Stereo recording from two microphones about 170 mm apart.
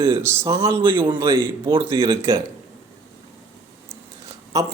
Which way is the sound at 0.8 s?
30° right (ahead or behind).